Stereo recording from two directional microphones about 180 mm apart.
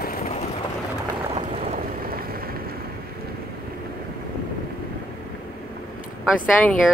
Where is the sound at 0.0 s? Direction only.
55° left (ahead or behind).